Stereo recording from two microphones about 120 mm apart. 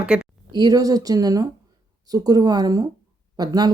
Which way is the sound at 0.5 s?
30° right (ahead or behind).